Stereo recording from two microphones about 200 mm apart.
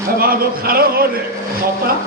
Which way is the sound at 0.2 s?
50° right (ahead or behind).